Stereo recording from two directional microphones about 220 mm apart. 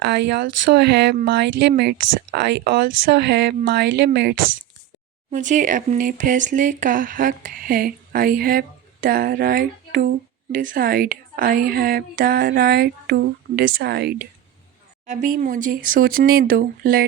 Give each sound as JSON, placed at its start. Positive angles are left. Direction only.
{"t": 0.0, "sound": "speech", "side_deg": -50}
{"t": 5.3, "sound": "speech", "side_deg": -35}
{"t": 15.0, "sound": "speech", "side_deg": -35}